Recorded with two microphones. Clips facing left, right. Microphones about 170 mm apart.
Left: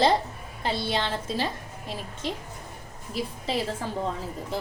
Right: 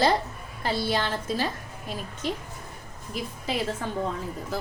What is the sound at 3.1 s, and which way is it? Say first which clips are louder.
Speech: left 1 dB; 30° left (ahead or behind).